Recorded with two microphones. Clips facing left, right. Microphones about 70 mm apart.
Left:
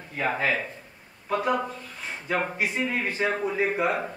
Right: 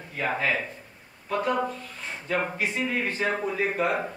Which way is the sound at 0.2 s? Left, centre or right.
Centre.